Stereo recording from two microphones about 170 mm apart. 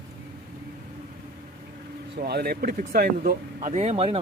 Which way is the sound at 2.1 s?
70° right (ahead or behind).